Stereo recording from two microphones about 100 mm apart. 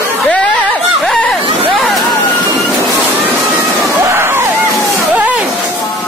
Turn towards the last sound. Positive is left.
turn(degrees=-15)  # may be behind; listen again after turning